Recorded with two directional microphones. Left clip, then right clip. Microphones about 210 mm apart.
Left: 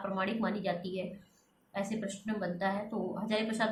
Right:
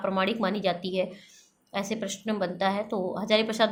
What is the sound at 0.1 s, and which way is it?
A woman's voice, 50° right (ahead or behind).